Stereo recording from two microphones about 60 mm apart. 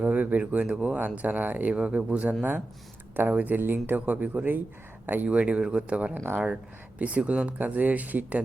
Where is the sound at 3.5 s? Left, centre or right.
Right.